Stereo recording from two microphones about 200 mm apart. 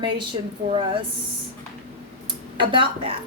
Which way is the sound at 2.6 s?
25° right (ahead or behind).